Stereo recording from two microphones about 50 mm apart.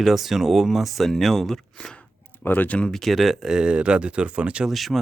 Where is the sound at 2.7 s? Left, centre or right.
Left.